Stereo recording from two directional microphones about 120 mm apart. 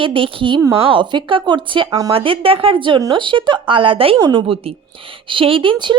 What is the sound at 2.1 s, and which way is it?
Speech, 50° right (ahead or behind).